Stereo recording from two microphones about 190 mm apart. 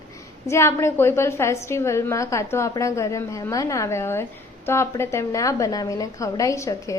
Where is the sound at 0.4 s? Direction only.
15° left (ahead or behind).